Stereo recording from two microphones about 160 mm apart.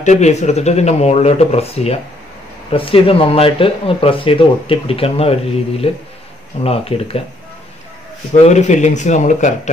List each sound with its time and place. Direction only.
0.0 s speech: 45° left (ahead or behind)
8.5 s speech: 45° left (ahead or behind)